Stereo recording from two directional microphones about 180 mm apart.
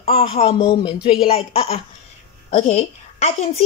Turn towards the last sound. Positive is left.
turn(degrees=40)  # may be behind; listen again after turning